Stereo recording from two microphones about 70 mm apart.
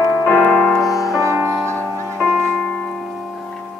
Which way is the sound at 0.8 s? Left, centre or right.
Left.